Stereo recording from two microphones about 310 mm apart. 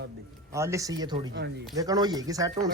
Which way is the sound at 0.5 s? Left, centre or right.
Centre.